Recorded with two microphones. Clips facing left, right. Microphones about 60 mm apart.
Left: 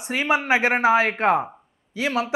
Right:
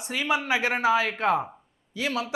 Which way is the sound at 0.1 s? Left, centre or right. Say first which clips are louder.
Left 5 dB; left.